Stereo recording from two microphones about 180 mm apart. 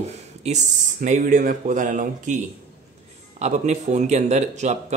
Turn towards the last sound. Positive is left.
turn(degrees=-40)  # may be behind; listen again after turning